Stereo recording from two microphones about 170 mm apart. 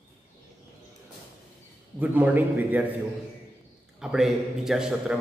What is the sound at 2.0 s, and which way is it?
Speech, 10° right (ahead or behind).